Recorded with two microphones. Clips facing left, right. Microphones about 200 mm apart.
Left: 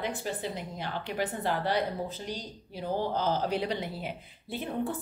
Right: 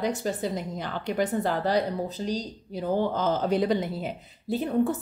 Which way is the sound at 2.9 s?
50° right (ahead or behind).